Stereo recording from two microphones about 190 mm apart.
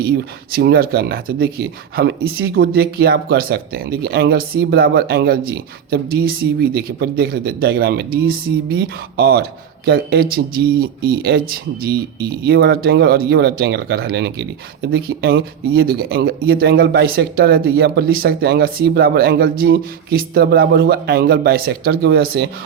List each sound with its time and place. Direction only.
0.5 s speech: 55° right (ahead or behind)